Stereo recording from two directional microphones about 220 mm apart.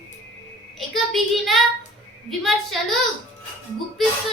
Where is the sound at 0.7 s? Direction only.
Centre (ahead or behind).